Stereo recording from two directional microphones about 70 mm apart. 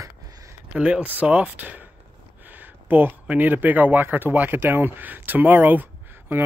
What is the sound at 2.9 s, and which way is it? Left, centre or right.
Speech, right.